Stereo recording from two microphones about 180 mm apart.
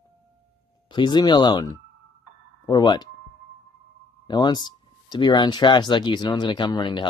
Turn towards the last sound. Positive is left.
turn(degrees=25)  # may be behind; listen again after turning